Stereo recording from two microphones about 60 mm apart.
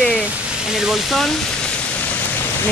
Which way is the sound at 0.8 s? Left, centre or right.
Centre.